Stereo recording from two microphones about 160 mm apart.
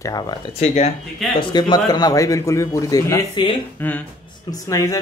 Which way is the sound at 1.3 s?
25° left (ahead or behind).